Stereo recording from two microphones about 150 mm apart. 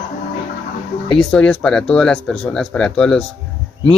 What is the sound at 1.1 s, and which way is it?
Speech, 5° left (ahead or behind).